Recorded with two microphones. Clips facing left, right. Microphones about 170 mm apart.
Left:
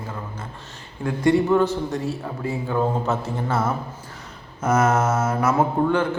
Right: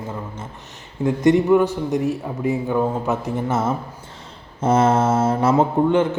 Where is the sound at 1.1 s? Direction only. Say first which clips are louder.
Right 3 dB; 20° right (ahead or behind).